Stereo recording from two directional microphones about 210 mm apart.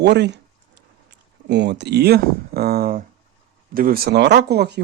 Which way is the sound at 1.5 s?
55° right (ahead or behind).